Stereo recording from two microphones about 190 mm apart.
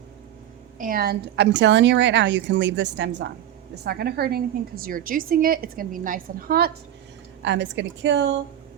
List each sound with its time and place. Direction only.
0.8 s a woman's voice: 50° right (ahead or behind); by 3.3 s 65° right (ahead or behind)
3.8 s a woman's voice: 55° right (ahead or behind)
7.4 s a woman's voice: 70° right (ahead or behind)